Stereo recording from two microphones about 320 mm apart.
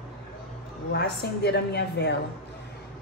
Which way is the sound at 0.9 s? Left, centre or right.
Left.